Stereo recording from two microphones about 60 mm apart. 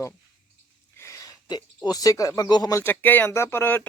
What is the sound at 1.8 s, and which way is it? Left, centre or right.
Speech, left.